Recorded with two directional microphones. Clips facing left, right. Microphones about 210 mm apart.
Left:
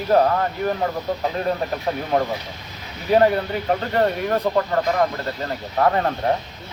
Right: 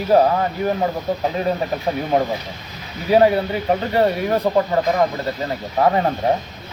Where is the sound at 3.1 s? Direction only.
10° right (ahead or behind).